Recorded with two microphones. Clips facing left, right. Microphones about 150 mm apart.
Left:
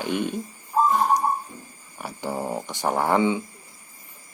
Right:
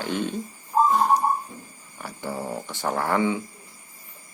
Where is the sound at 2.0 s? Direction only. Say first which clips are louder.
Left 2 dB; 15° left (ahead or behind).